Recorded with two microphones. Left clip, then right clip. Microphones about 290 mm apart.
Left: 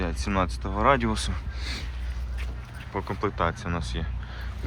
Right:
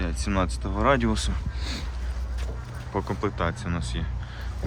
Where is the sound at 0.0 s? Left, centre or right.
Centre.